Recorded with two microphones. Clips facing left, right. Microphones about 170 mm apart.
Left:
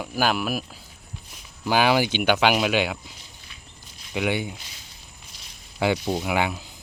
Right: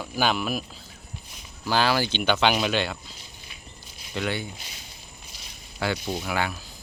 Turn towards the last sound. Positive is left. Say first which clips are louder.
# left 4 dB
turn(degrees=20)  # may be behind; listen again after turning